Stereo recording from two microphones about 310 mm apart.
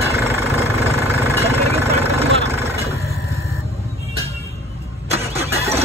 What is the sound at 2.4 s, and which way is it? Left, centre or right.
Vehicle, centre.